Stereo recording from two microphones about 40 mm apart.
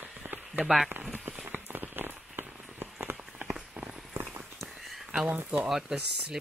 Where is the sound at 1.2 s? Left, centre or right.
Right.